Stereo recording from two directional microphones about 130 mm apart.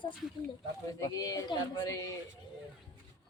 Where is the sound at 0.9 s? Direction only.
30° left (ahead or behind).